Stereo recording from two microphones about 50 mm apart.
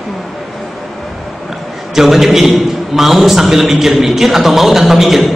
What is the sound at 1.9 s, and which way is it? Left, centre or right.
A woman's voice, centre.